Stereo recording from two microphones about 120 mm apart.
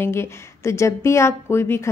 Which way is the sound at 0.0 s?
20° left (ahead or behind).